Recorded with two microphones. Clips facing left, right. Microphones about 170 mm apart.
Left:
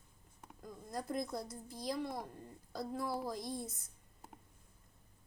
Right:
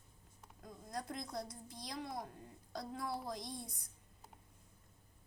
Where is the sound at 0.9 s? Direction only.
5° left (ahead or behind).